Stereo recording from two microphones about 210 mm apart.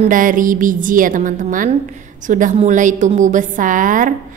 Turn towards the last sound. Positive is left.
turn(degrees=-40)  # may be behind; listen again after turning